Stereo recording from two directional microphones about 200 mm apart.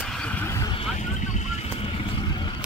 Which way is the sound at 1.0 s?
35° left (ahead or behind).